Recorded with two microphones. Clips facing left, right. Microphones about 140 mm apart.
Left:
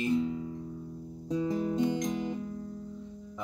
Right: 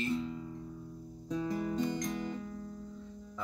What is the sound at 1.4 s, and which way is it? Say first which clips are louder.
Music: left 5 dB; 20° left (ahead or behind).